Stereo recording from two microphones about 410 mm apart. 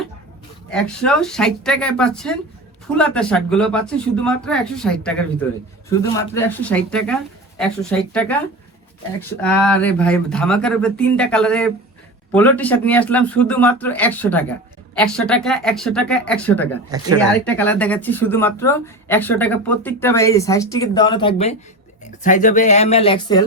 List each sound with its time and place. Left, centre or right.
0.7 s speech: centre
9.4 s speech: centre